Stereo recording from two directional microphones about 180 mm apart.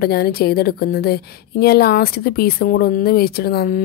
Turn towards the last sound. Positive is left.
turn(degrees=55)  # may be behind; listen again after turning